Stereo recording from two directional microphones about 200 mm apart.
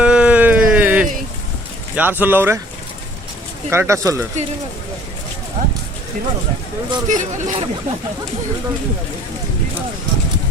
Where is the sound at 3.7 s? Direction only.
15° right (ahead or behind).